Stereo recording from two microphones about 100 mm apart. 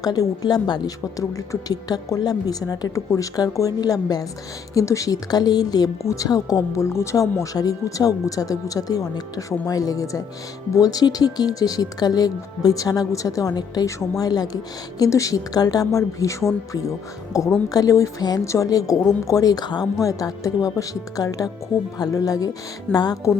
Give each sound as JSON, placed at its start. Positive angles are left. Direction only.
{"t": 0.0, "sound": "speech", "side_deg": 40}